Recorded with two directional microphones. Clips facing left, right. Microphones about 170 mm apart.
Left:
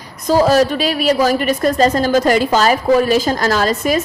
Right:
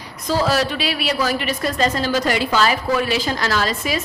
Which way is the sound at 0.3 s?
45° left (ahead or behind).